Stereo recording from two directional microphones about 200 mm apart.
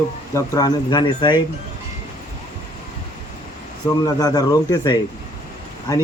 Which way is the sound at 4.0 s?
20° left (ahead or behind).